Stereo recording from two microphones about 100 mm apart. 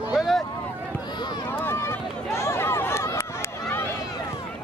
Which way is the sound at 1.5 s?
20° left (ahead or behind).